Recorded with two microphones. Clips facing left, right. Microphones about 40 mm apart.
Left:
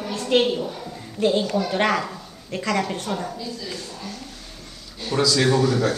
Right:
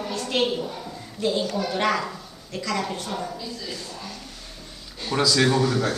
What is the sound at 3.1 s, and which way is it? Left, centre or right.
Speech, centre.